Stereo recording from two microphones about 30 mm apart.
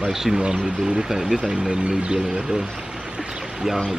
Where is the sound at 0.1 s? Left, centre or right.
Centre.